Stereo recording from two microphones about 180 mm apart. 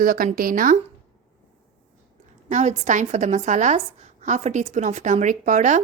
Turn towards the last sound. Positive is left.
turn(degrees=-45)  # may be behind; listen again after turning